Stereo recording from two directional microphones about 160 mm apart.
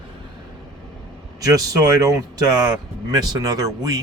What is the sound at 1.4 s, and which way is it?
Speech, 20° right (ahead or behind).